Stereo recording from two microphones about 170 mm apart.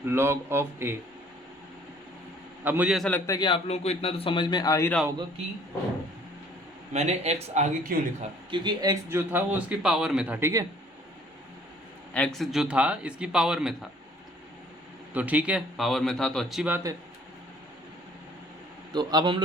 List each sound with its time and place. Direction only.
0.0 s speech: 15° right (ahead or behind)
2.6 s speech: 10° right (ahead or behind)
3.2 s speech: 25° left (ahead or behind)
6.9 s speech: 40° right (ahead or behind)
8.2 s speech: 30° right (ahead or behind)
12.1 s speech: 5° left (ahead or behind)
15.1 s speech: 10° right (ahead or behind)
18.9 s a man's voice: 25° right (ahead or behind)